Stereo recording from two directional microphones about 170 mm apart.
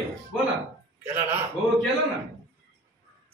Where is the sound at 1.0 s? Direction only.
10° right (ahead or behind).